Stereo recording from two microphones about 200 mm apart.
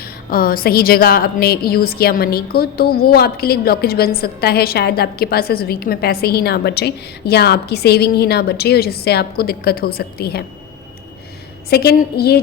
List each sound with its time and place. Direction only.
0.0 s a woman's voice: 45° left (ahead or behind)
11.7 s a woman's voice: 55° left (ahead or behind)